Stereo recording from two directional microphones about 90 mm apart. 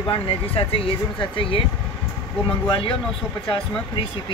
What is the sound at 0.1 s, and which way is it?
Speech, 90° left.